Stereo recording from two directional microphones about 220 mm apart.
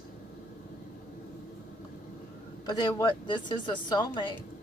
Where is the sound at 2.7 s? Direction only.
20° left (ahead or behind).